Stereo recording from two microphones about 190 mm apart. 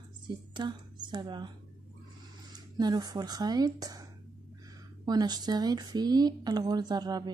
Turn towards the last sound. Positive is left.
turn(degrees=-20)  # may be behind; listen again after turning